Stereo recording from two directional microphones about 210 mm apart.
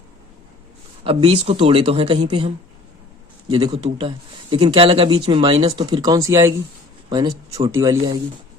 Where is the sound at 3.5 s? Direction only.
25° right (ahead or behind).